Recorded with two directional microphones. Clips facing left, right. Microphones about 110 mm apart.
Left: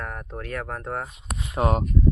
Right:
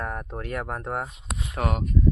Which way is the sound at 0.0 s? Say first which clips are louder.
Right 2 dB; 15° right (ahead or behind).